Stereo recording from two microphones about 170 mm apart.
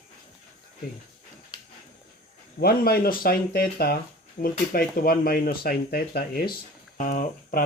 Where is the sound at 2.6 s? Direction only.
65° left (ahead or behind).